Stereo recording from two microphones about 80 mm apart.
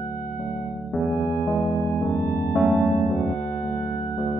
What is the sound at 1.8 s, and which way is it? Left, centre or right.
Music, left.